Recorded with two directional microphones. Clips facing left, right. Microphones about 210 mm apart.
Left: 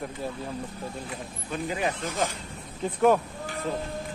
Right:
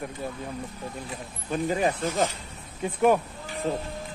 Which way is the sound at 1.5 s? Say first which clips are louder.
Right 4 dB; 35° right (ahead or behind).